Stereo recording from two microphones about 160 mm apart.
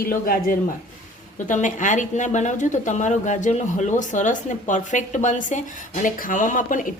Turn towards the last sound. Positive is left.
turn(degrees=55)  # may be behind; listen again after turning